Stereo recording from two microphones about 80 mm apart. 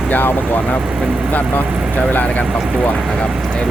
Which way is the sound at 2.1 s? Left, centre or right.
Left.